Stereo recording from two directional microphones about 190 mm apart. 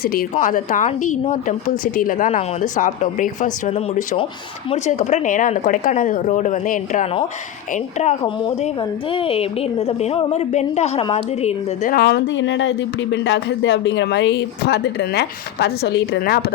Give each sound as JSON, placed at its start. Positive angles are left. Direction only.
{"t": 0.0, "sound": "a woman's voice", "side_deg": 50}
{"t": 8.4, "sound": "a woman's voice", "side_deg": 30}
{"t": 11.9, "sound": "speech", "side_deg": 60}